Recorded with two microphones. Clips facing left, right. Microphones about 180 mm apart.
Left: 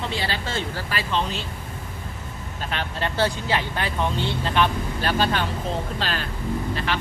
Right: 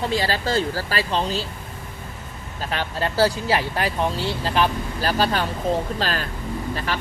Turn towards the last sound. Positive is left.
turn(degrees=-40)  # may be behind; listen again after turning